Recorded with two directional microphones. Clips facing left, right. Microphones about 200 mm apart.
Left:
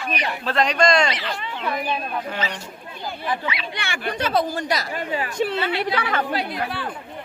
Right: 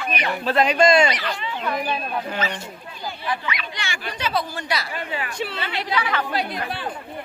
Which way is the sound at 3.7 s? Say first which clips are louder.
Left 5 dB; 60° left (ahead or behind).